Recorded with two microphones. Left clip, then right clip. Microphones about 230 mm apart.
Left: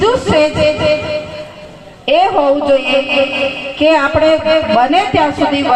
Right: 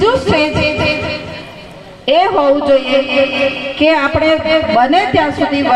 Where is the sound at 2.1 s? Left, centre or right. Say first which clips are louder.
Even; right.